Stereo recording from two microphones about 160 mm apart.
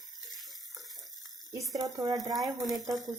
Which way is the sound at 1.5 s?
20° right (ahead or behind).